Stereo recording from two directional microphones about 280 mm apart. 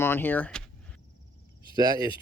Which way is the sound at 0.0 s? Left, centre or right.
Centre.